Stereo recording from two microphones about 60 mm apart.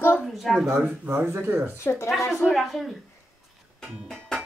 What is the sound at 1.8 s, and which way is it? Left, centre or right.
Speech, left.